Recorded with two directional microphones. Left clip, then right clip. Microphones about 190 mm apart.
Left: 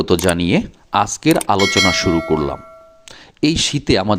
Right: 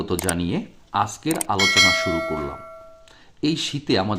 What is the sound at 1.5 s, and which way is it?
Speech, centre (ahead or behind).